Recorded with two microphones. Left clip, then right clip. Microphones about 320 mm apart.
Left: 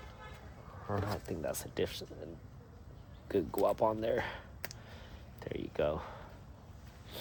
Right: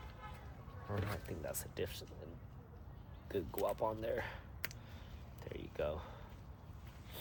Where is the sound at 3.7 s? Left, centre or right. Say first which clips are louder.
Left 7 dB; left.